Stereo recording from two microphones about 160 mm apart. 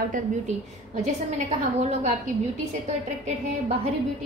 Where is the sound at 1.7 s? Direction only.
45° right (ahead or behind).